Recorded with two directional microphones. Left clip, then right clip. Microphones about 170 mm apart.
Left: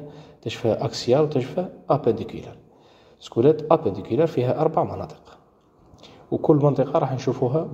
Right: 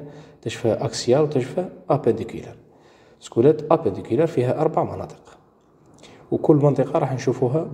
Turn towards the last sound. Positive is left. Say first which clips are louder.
# right 1 dB
turn(degrees=-5)  # may be behind; listen again after turning